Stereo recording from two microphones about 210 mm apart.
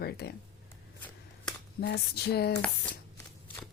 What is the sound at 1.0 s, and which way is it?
Shuffling cards, 10° left (ahead or behind).